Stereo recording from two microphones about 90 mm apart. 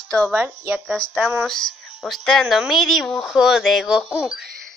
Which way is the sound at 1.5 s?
5° left (ahead or behind).